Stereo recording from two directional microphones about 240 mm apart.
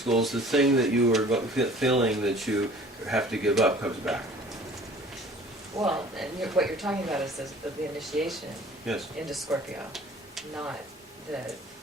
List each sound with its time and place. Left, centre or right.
0.0 s speech: centre
5.7 s a man's voice: centre
6.1 s speech: centre
9.9 s stir: centre